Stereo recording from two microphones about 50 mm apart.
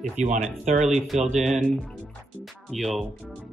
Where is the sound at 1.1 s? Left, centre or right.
Centre.